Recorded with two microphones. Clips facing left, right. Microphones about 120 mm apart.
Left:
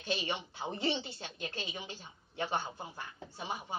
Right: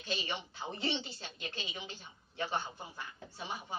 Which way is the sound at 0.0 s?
20° left (ahead or behind).